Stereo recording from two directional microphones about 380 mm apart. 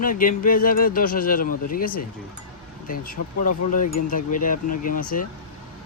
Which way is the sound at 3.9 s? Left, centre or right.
Left.